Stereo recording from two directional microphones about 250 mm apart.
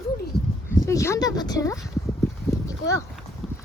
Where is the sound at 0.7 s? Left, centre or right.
Centre.